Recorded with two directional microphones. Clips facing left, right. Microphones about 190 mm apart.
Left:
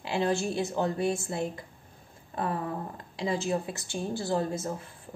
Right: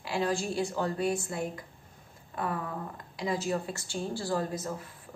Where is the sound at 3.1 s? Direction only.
25° left (ahead or behind).